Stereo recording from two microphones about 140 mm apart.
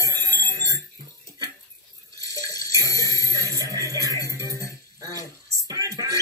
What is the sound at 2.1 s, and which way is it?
Water, 25° right (ahead or behind).